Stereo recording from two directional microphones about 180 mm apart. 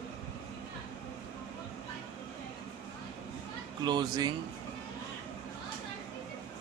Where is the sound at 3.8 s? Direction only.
25° right (ahead or behind).